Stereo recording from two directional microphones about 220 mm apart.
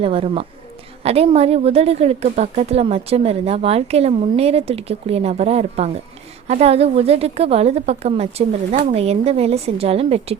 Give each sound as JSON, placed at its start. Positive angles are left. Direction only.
{"t": 0.0, "sound": "a woman's voice", "side_deg": -25}